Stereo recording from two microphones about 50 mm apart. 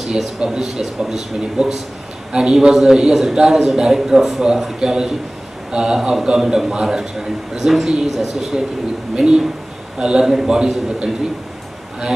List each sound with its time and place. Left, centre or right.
0.0 s a man's voice: centre